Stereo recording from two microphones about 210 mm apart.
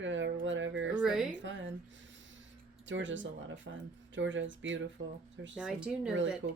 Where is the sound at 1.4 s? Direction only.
60° right (ahead or behind).